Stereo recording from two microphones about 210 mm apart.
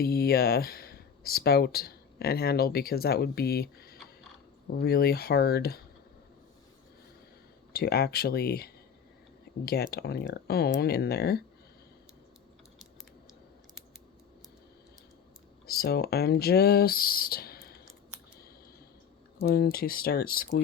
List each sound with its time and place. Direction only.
0.0 s speech: 45° left (ahead or behind)
7.7 s speech: 50° left (ahead or behind)
15.6 s speech: 50° left (ahead or behind)
19.4 s speech: 45° left (ahead or behind)